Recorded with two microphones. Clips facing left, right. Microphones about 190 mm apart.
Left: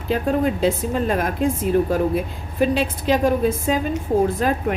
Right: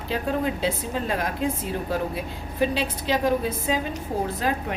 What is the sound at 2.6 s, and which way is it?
A woman's voice, 50° left (ahead or behind).